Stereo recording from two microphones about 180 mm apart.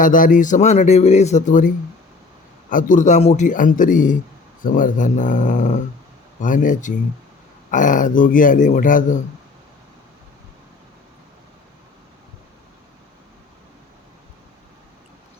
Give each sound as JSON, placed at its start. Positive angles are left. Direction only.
{"t": 0.0, "sound": "a man's voice", "side_deg": 50}